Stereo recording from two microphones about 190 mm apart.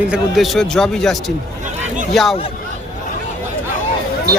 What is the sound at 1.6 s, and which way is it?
Hubbub, 40° right (ahead or behind).